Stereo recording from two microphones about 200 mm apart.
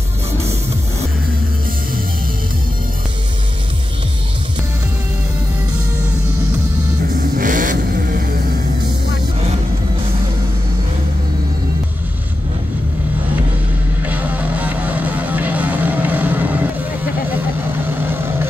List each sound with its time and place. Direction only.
7.3 s vehicle: 40° right (ahead or behind)
14.0 s music: 10° right (ahead or behind)
17.8 s music: 10° right (ahead or behind)